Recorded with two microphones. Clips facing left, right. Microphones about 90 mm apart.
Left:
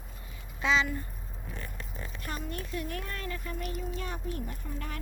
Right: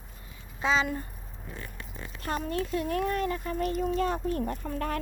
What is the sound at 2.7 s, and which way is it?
Speech, 25° right (ahead or behind).